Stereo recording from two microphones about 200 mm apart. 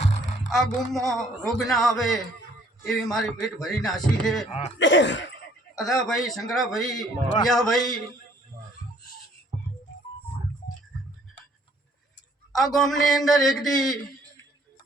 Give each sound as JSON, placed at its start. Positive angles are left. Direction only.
{"t": 0.5, "sound": "a man's voice", "side_deg": 0}
{"t": 4.8, "sound": "cough", "side_deg": 65}
{"t": 5.7, "sound": "a man's voice", "side_deg": 0}
{"t": 12.5, "sound": "a man's voice", "side_deg": 0}